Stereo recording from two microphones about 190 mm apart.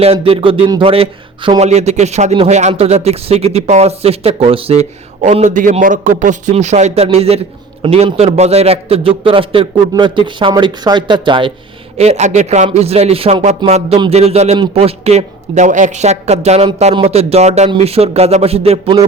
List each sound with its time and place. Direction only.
0.0 s speech: 30° right (ahead or behind)